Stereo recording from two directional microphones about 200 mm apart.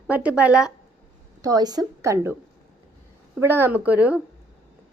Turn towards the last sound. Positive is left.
turn(degrees=-10)  # may be behind; listen again after turning